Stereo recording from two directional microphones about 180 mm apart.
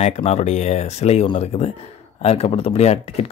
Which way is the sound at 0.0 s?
35° left (ahead or behind).